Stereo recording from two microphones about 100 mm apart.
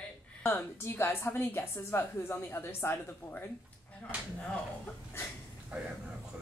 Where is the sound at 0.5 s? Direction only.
25° left (ahead or behind).